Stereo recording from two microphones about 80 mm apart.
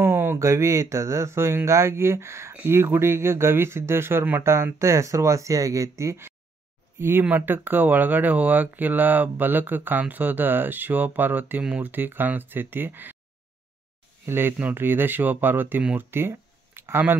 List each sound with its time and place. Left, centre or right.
0.0 s speech: right
14.2 s speech: right
16.0 s a sound: right